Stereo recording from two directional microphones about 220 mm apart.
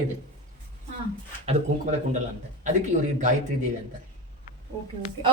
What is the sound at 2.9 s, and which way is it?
Speech, 35° right (ahead or behind).